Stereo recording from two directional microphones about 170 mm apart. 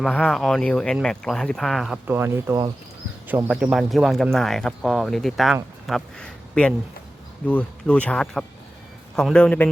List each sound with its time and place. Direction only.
0.0 s speech: centre (ahead or behind)
2.0 s a man's voice: 15° right (ahead or behind); by 9.6 s 5° left (ahead or behind)